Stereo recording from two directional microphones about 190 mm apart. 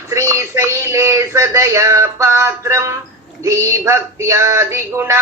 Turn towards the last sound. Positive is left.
turn(degrees=-15)  # may be behind; listen again after turning